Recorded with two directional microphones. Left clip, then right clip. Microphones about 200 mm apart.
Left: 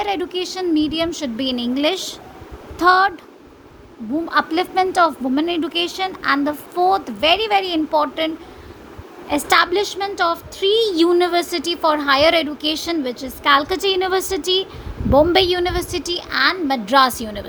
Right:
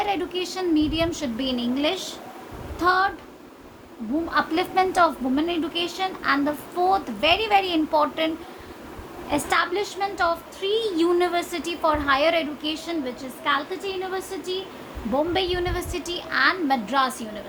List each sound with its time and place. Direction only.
0.0 s a woman's voice: 25° left (ahead or behind); by 3.1 s 40° left (ahead or behind)
4.3 s a woman's voice: 25° left (ahead or behind)
5.3 s a woman's voice: 35° left (ahead or behind)
9.3 s a woman's voice: 35° left (ahead or behind)
16.9 s a woman's voice: 30° left (ahead or behind)